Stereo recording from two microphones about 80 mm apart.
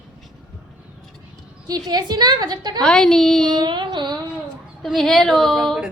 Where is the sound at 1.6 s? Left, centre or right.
Right.